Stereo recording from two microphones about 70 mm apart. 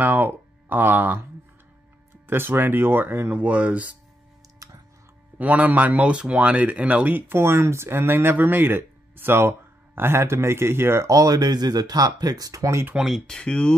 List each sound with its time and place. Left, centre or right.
0.0 s speech: right
2.2 s speech: right
3.3 s speech: centre
4.6 s music: right
5.4 s speech: right
11.1 s speech: right
12.9 s speech: centre
13.3 s speech: centre